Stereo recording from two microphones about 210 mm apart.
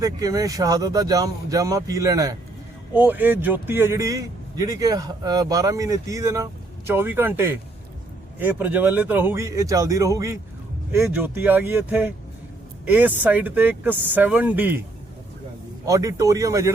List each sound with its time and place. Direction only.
0.0 s a man's voice: 15° right (ahead or behind)
15.9 s a man's voice: 15° right (ahead or behind)